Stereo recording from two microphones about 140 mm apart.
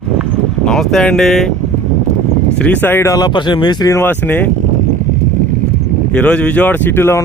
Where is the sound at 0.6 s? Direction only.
5° left (ahead or behind).